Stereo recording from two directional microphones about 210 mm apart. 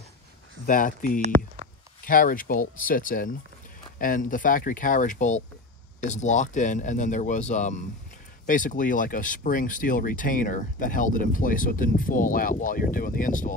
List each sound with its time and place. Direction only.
0.7 s speech: 40° left (ahead or behind)